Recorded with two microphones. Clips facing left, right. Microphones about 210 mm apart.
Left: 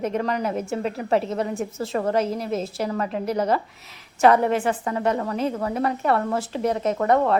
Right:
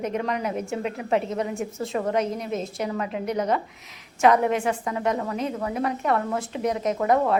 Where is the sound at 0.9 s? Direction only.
40° left (ahead or behind).